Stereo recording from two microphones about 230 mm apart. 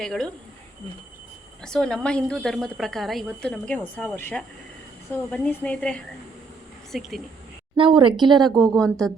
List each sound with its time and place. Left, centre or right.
0.0 s a woman's voice: centre
1.6 s a woman's voice: centre
7.8 s a woman's voice: right
8.8 s a woman's voice: centre